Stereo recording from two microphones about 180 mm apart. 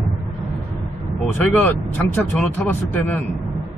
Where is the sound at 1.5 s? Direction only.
10° left (ahead or behind).